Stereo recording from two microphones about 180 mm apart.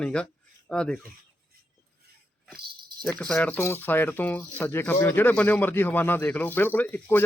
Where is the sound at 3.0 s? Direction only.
5° left (ahead or behind).